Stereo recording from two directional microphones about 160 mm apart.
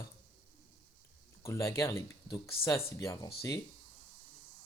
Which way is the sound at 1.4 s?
20° left (ahead or behind).